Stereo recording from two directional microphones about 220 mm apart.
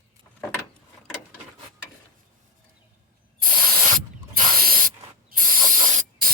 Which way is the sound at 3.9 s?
40° right (ahead or behind).